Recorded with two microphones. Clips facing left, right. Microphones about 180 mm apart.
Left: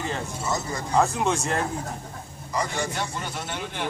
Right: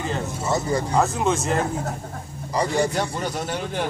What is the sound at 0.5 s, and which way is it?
Speech, 30° right (ahead or behind).